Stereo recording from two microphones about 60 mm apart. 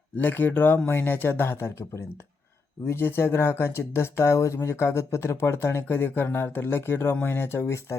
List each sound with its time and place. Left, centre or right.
0.2 s speech: left
7.6 s speech: left